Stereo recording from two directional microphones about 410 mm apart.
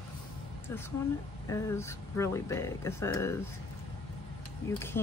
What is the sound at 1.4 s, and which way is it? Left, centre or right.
Speech, centre.